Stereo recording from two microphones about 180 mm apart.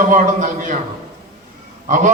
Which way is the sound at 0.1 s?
45° right (ahead or behind).